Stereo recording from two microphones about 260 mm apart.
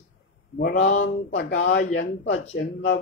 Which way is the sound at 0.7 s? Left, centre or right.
Left.